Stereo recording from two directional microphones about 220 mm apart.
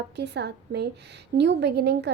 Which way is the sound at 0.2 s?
50° right (ahead or behind).